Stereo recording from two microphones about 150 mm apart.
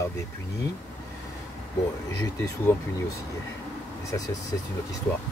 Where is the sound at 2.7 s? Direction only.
15° left (ahead or behind).